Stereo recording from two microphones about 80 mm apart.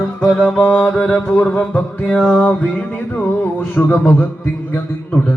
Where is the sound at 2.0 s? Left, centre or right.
Centre.